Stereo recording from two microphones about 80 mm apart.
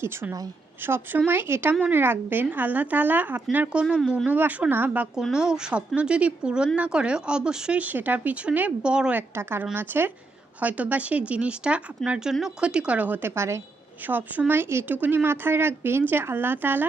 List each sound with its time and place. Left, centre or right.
0.0 s a woman's voice: right
5.3 s speech: centre
9.3 s speech: right
13.3 s a woman's voice: right
14.1 s speech: right